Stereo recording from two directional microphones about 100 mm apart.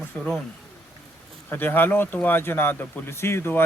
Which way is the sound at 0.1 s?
25° left (ahead or behind).